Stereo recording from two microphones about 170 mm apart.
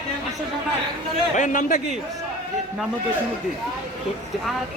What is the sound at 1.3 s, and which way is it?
Speech, 50° left (ahead or behind).